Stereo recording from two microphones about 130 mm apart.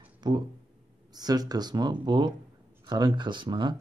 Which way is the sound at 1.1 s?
30° right (ahead or behind).